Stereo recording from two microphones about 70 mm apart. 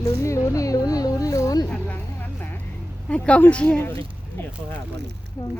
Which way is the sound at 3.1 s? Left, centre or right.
Centre.